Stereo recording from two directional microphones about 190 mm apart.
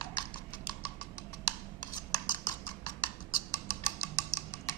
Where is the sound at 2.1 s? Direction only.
20° left (ahead or behind).